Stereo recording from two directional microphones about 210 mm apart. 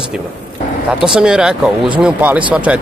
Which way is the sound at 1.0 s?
5° right (ahead or behind).